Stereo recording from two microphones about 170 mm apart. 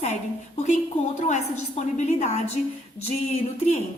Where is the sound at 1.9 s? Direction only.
45° left (ahead or behind).